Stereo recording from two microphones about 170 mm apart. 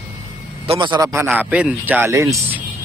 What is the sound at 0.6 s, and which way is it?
Speech, 30° right (ahead or behind).